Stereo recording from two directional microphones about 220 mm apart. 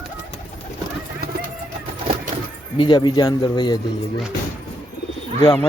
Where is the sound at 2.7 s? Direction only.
20° left (ahead or behind).